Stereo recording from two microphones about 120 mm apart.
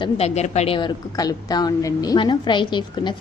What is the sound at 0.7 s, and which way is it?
A woman's voice, 40° left (ahead or behind).